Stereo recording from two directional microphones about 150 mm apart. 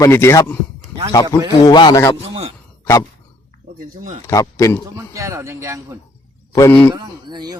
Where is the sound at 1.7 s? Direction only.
30° left (ahead or behind).